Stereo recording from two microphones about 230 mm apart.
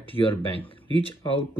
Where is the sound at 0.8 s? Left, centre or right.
Right.